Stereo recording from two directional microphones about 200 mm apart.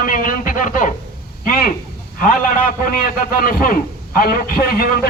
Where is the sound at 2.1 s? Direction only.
40° left (ahead or behind).